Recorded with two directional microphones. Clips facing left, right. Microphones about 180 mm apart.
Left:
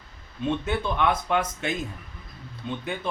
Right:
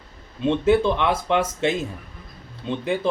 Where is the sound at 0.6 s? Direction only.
30° right (ahead or behind).